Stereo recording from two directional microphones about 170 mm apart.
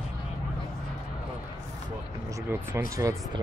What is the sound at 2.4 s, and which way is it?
Speech, 15° right (ahead or behind).